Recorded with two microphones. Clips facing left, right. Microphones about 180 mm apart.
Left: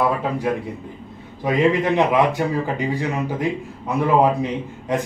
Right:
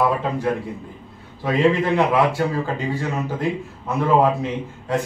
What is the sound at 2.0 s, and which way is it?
Speech, 20° left (ahead or behind).